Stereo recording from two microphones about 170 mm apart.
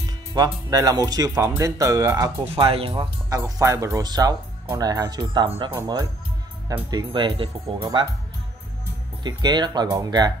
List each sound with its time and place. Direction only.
0.3 s speech: 20° right (ahead or behind)
2.5 s speech: 35° right (ahead or behind)
9.2 s speech: 25° right (ahead or behind)